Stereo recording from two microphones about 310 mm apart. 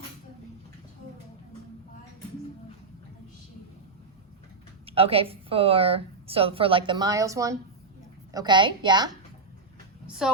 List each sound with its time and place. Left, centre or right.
4.9 s a woman's voice: centre
10.1 s speech: centre